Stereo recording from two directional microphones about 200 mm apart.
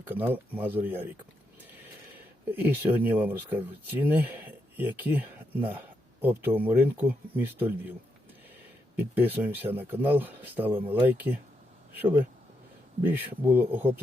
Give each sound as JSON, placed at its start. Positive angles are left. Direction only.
{"t": 0.0, "sound": "speech", "side_deg": -10}
{"t": 9.0, "sound": "speech", "side_deg": -10}
{"t": 13.0, "sound": "speech", "side_deg": -10}